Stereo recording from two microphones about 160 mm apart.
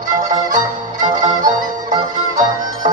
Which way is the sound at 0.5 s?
55° right (ahead or behind).